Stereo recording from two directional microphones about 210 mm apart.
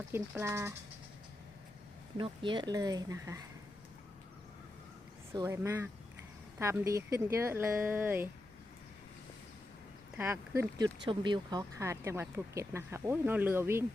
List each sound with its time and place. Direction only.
0.1 s speech: 15° right (ahead or behind)
2.1 s speech: 25° right (ahead or behind)
5.3 s speech: 15° right (ahead or behind)
10.2 s speech: 10° right (ahead or behind)